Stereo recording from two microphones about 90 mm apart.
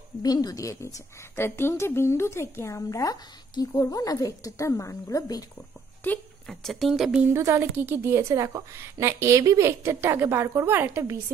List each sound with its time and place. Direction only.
0.2 s speech: 45° left (ahead or behind)
1.3 s speech: 25° left (ahead or behind)
2.9 s speech: 40° left (ahead or behind)
6.0 s speech: 20° left (ahead or behind)
6.4 s speech: 5° left (ahead or behind)
7.3 s a woman's voice: 30° right (ahead or behind)